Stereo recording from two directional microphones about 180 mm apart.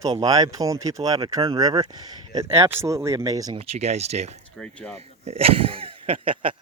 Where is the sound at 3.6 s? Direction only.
35° right (ahead or behind).